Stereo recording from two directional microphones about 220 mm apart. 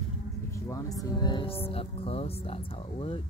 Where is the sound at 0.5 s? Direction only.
15° left (ahead or behind).